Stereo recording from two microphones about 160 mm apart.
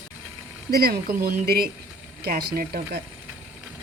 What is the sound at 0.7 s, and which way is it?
A woman's voice, 70° right (ahead or behind).